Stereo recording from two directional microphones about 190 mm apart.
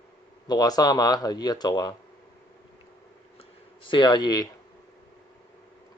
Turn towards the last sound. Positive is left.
turn(degrees=20)  # may be behind; listen again after turning